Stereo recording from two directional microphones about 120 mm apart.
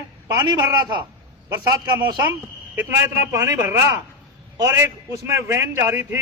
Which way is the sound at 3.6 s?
20° right (ahead or behind).